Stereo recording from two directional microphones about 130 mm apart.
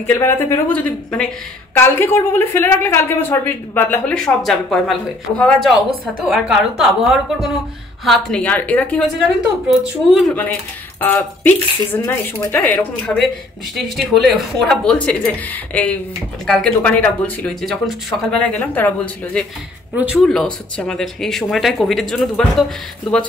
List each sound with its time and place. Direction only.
0.0 s a woman's voice: 15° left (ahead or behind)
4.2 s a woman's voice: centre (ahead or behind)
9.7 s speech: centre (ahead or behind)
11.0 s a woman's voice: 15° left (ahead or behind)
13.0 s speech: centre (ahead or behind)
20.2 s speech: 5° left (ahead or behind)